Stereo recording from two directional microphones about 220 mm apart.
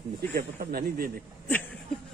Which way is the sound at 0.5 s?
40° right (ahead or behind).